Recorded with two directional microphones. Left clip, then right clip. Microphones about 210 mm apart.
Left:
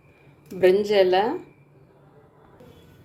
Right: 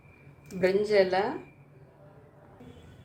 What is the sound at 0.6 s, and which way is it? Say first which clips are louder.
Speech: left 6 dB; 40° left (ahead or behind).